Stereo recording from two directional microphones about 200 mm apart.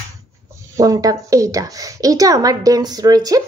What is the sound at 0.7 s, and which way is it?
A woman's voice, 15° right (ahead or behind).